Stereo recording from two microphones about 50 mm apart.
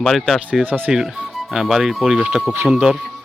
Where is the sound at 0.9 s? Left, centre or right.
Centre.